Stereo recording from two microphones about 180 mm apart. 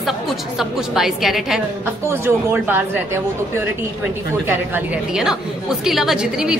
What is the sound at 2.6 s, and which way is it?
Speech, 10° right (ahead or behind).